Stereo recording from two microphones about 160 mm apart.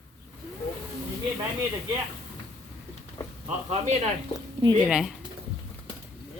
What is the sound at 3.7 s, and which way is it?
Speech, 45° right (ahead or behind).